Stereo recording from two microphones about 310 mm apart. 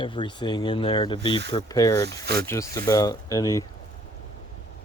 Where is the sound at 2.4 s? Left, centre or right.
Centre.